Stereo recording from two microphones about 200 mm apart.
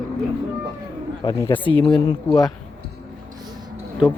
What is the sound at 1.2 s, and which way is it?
Speech, 20° left (ahead or behind).